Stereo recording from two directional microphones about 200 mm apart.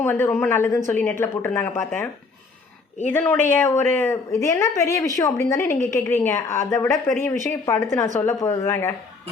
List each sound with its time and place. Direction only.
0.0 s a woman's voice: 10° left (ahead or behind)
3.1 s a woman's voice: 10° left (ahead or behind)